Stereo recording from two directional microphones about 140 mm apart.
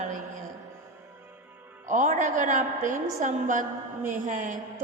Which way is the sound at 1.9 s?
65° right (ahead or behind).